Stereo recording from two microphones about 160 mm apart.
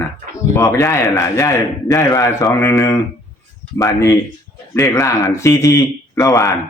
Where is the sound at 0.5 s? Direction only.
15° left (ahead or behind).